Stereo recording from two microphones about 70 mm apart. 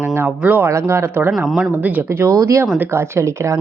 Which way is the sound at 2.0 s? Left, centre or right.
Right.